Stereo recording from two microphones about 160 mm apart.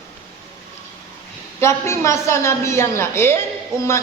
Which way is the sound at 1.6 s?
15° left (ahead or behind).